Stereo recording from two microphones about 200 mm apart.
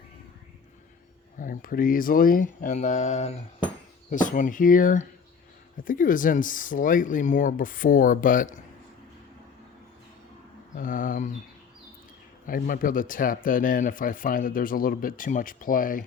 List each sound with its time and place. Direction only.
1.4 s speech: 45° left (ahead or behind)
10.8 s speech: 40° left (ahead or behind)
12.5 s speech: 45° left (ahead or behind)